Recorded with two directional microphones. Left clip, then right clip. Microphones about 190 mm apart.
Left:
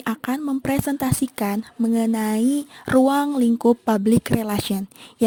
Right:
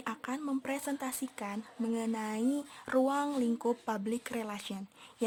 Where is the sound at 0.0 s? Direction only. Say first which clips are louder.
Left 12 dB; 35° left (ahead or behind).